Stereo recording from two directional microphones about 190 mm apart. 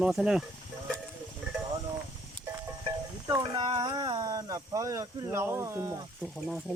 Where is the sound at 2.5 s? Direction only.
15° right (ahead or behind).